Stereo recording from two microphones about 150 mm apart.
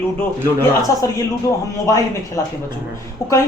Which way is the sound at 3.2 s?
20° left (ahead or behind).